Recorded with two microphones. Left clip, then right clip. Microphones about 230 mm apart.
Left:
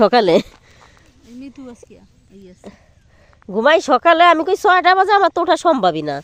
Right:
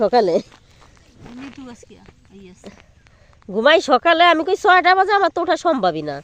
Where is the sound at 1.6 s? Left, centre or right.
Right.